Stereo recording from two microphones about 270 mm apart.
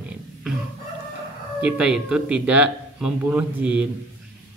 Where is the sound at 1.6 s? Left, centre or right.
Centre.